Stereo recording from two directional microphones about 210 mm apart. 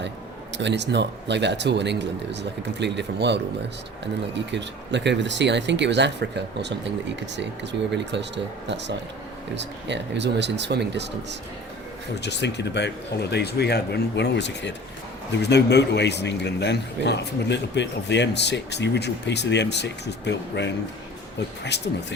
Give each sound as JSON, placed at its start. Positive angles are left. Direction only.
{"t": 0.5, "sound": "speech", "side_deg": -55}
{"t": 12.2, "sound": "a man's voice", "side_deg": 55}